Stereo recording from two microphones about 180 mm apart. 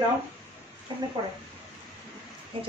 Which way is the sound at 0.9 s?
25° right (ahead or behind).